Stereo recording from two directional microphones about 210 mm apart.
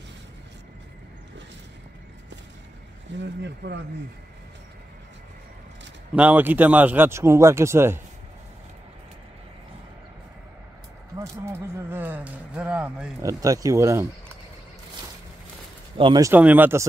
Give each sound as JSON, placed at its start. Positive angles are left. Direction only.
{"t": 3.2, "sound": "speech", "side_deg": -55}
{"t": 6.1, "sound": "speech", "side_deg": -10}
{"t": 11.1, "sound": "speech", "side_deg": -10}
{"t": 16.0, "sound": "speech", "side_deg": -20}